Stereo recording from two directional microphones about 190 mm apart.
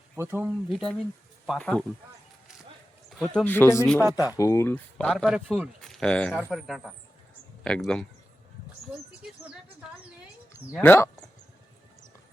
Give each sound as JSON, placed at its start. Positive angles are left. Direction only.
{"t": 0.2, "sound": "speech", "side_deg": -10}
{"t": 3.1, "sound": "speech", "side_deg": 0}
{"t": 4.4, "sound": "speech", "side_deg": 15}
{"t": 10.8, "sound": "speech", "side_deg": 10}